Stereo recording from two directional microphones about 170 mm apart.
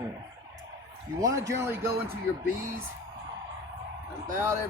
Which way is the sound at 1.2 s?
20° right (ahead or behind).